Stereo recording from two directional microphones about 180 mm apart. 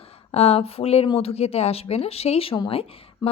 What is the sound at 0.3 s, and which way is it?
A woman's voice, 35° left (ahead or behind).